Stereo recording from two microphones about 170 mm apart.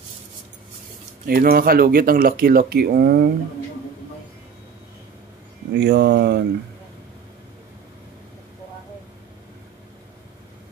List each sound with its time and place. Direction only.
1.2 s speech: 60° right (ahead or behind)
5.8 s speech: 80° right